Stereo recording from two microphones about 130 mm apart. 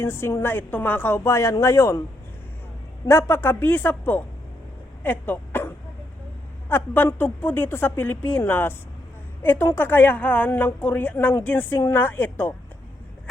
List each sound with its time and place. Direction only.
0.0 s a woman's voice: 20° left (ahead or behind)
3.1 s a woman's voice: 20° left (ahead or behind)
5.0 s dog: 15° left (ahead or behind)
6.7 s a woman's voice: 15° left (ahead or behind)